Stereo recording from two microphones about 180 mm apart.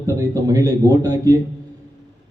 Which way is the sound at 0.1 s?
20° right (ahead or behind).